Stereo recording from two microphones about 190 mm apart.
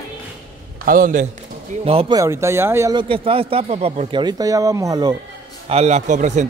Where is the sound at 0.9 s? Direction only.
45° right (ahead or behind).